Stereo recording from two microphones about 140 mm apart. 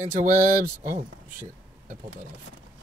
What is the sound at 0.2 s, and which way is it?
Speech, 65° right (ahead or behind).